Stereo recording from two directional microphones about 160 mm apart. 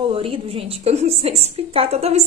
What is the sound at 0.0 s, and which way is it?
A woman's voice, 35° right (ahead or behind).